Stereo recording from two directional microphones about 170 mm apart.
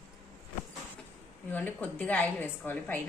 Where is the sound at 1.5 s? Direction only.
10° left (ahead or behind).